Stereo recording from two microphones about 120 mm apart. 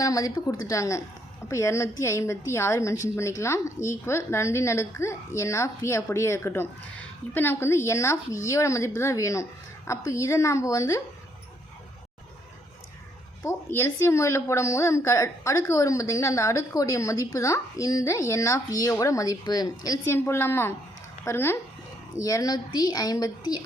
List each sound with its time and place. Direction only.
0.0 s a woman's voice: 30° left (ahead or behind)
13.4 s a woman's voice: 20° left (ahead or behind)
20.1 s a woman's voice: 20° left (ahead or behind)